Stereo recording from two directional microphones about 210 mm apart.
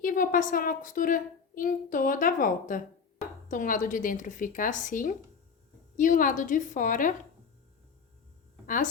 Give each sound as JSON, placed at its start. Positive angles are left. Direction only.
{"t": 0.0, "sound": "a woman's voice", "side_deg": 40}
{"t": 8.6, "sound": "speech", "side_deg": 40}